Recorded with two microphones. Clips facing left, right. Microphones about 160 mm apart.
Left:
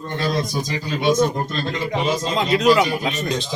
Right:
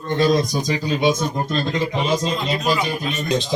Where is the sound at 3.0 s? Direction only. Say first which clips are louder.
Left 1 dB; 80° left.